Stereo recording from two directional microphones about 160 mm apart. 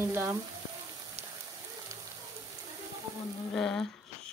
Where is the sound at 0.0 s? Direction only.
15° right (ahead or behind).